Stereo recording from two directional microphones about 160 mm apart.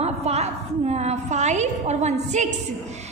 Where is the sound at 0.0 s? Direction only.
40° right (ahead or behind).